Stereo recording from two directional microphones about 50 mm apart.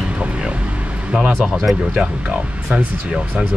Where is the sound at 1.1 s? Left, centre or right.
Centre.